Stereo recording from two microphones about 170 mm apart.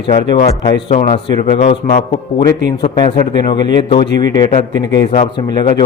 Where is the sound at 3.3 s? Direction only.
25° left (ahead or behind).